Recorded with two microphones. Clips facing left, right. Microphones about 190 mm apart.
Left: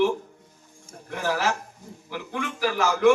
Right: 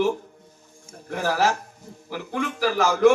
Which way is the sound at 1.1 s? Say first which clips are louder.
Right 3 dB; 40° right (ahead or behind).